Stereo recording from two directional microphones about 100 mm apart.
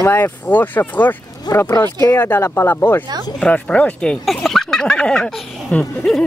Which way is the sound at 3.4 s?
10° left (ahead or behind).